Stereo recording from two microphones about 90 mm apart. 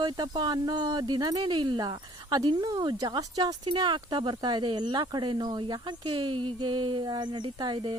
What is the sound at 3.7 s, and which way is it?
Speech, 55° right (ahead or behind).